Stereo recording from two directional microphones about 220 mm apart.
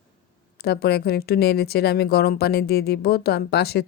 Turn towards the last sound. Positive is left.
turn(degrees=45)  # may be behind; listen again after turning